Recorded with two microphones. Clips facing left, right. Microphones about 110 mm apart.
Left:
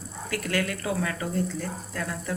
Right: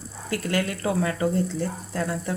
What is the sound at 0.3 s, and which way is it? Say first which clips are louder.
Speech: right 2 dB; 25° right (ahead or behind).